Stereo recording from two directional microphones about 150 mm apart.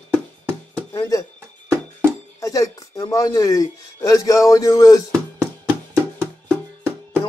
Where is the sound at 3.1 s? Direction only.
25° left (ahead or behind).